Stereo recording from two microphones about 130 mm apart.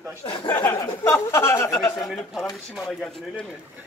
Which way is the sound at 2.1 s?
5° left (ahead or behind).